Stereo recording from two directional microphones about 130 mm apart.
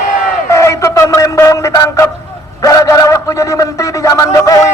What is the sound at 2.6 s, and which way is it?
A man's voice, 25° left (ahead or behind).